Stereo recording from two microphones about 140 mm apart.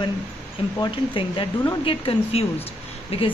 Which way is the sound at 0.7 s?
35° left (ahead or behind).